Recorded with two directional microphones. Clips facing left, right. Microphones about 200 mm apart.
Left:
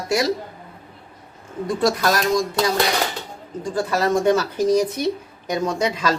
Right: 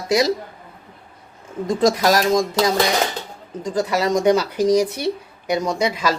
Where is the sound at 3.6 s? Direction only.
15° right (ahead or behind).